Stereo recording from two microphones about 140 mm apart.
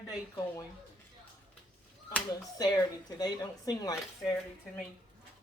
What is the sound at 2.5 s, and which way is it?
Speech, 25° left (ahead or behind).